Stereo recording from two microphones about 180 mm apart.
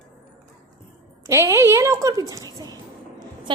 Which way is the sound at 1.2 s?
15° right (ahead or behind).